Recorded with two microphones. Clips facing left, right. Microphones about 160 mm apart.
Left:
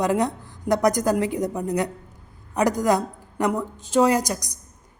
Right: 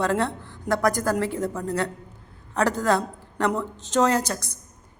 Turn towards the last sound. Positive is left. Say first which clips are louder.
# left 2 dB
turn(degrees=15)  # may be behind; listen again after turning